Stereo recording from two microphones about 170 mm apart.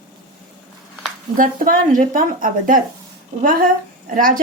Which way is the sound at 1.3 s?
55° right (ahead or behind).